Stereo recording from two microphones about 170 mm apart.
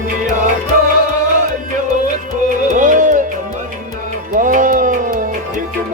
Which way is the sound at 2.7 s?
50° right (ahead or behind).